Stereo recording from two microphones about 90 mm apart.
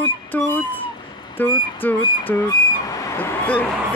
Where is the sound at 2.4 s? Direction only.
40° left (ahead or behind).